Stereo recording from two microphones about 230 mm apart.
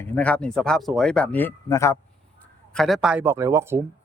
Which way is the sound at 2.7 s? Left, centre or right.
Centre.